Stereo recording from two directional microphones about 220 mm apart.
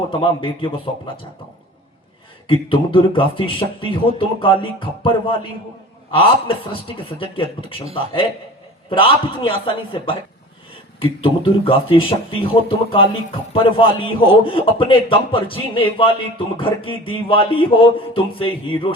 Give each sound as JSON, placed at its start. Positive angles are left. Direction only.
{"t": 0.1, "sound": "speech", "side_deg": 25}
{"t": 2.5, "sound": "speech", "side_deg": 25}